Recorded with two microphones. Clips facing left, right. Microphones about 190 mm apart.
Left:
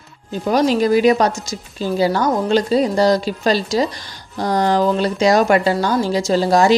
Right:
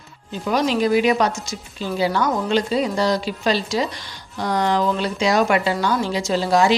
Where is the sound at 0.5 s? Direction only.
40° left (ahead or behind).